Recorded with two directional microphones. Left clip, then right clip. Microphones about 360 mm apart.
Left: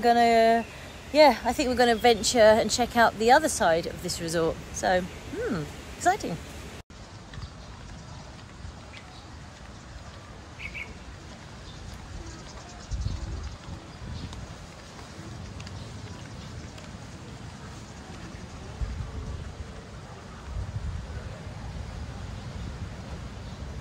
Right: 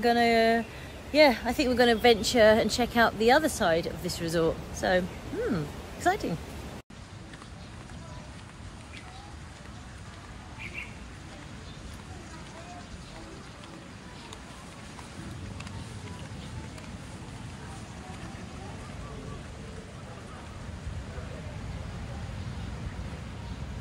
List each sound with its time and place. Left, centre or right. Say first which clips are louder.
0.0 s speech: left 3 dB; centre